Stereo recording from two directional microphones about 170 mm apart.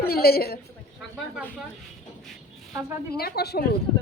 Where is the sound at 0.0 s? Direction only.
65° left (ahead or behind).